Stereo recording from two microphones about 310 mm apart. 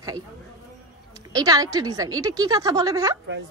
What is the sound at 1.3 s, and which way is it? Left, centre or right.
A woman's voice, centre.